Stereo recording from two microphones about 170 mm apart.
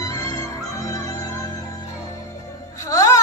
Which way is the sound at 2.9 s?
20° left (ahead or behind).